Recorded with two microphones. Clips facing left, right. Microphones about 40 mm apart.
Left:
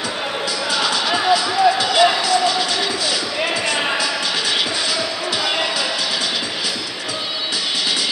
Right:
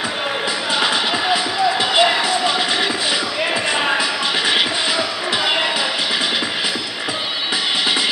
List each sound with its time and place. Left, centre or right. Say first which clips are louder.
0.7 s music: even; right
3.7 s basketball bounce: right 2 dB; centre
4.0 s music: right 2 dB; right